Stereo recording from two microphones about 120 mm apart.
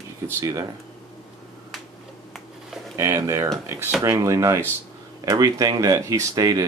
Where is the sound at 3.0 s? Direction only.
25° right (ahead or behind).